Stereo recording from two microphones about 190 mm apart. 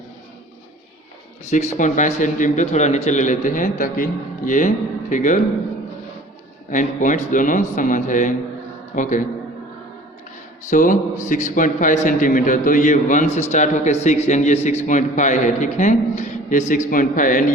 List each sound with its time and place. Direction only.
1.5 s a man's voice: 40° left (ahead or behind)
6.7 s a man's voice: 45° left (ahead or behind)
10.7 s a man's voice: 45° left (ahead or behind)